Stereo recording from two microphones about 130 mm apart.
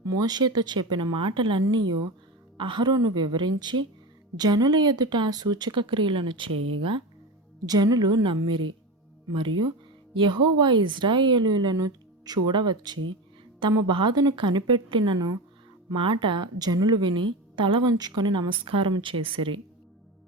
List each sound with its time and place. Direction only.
0.0 s a woman's voice: 30° right (ahead or behind)